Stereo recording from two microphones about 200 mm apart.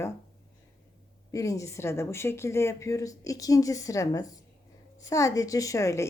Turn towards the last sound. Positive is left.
turn(degrees=15)  # may be behind; listen again after turning